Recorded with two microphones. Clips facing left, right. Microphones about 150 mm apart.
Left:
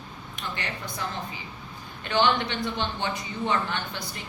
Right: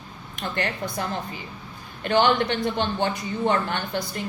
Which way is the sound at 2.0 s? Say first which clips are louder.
Right 4 dB; 50° right (ahead or behind).